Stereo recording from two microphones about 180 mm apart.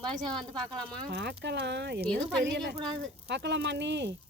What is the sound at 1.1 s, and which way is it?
Speech, 70° right (ahead or behind).